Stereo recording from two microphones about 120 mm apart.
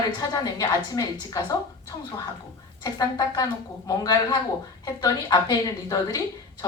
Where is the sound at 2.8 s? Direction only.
30° left (ahead or behind).